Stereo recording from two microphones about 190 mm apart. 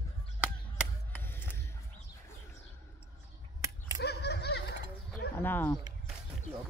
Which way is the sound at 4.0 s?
60° left (ahead or behind).